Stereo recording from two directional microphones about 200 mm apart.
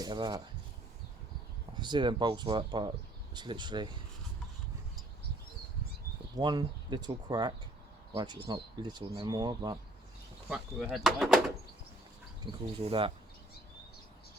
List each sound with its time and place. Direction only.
0.0 s speech: 20° right (ahead or behind)
1.8 s speech: 20° right (ahead or behind)
6.3 s speech: 20° right (ahead or behind)
10.5 s speech: 5° right (ahead or behind)
12.4 s speech: 25° right (ahead or behind)